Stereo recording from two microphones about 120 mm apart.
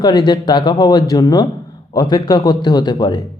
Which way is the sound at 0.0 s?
35° left (ahead or behind).